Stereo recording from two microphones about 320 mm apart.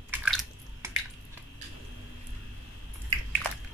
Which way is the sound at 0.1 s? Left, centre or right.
Centre.